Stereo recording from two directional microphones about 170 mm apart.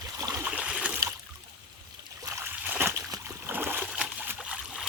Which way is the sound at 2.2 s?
15° right (ahead or behind).